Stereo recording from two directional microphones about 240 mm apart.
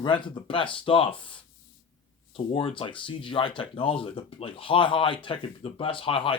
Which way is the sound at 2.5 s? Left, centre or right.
Left.